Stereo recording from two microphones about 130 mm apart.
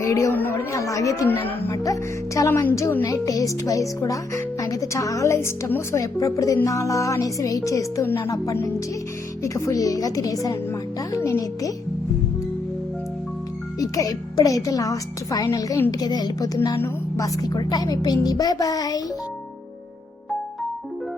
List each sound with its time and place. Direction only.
0.0 s speech: 25° left (ahead or behind)
1.8 s speech: 25° left (ahead or behind)
13.7 s speech: 25° left (ahead or behind)